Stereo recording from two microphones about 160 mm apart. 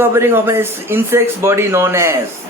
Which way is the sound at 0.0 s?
15° right (ahead or behind).